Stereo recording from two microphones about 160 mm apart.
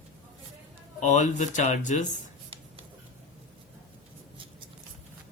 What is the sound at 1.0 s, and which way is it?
Speech, 50° left (ahead or behind).